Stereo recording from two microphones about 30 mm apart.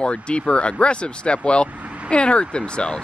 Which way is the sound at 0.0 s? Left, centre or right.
Left.